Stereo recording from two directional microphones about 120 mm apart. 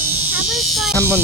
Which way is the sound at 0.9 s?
20° right (ahead or behind).